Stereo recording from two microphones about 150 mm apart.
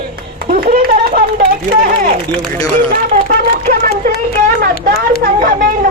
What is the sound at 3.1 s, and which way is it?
Speech, 70° right (ahead or behind).